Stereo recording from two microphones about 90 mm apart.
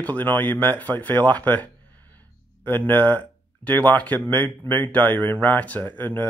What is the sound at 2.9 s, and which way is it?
Speech, 15° left (ahead or behind).